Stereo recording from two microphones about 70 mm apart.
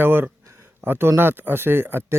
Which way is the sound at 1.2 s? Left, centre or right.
Right.